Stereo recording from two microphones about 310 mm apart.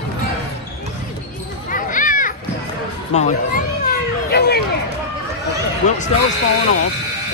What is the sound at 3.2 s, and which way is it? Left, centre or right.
Children playing, left.